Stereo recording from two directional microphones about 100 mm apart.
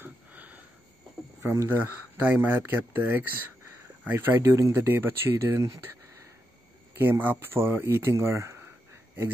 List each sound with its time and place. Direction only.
0.0 s sniff: 15° right (ahead or behind)
1.4 s speech: 25° right (ahead or behind)
7.0 s speech: 20° right (ahead or behind)